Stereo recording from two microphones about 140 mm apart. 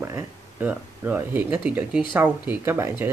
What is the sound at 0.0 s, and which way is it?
Speech, 15° right (ahead or behind).